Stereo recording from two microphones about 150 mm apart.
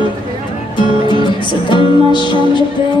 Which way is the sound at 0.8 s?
30° left (ahead or behind).